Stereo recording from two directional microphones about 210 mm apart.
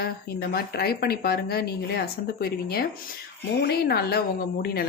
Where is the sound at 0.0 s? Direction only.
50° left (ahead or behind).